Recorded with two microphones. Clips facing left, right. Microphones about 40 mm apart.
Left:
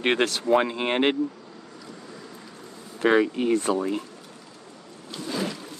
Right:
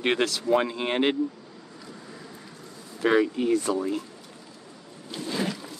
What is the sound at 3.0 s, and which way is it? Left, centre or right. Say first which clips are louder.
Speech: left 2 dB; left.